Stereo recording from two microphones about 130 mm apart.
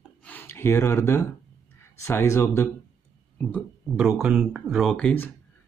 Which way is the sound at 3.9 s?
10° right (ahead or behind).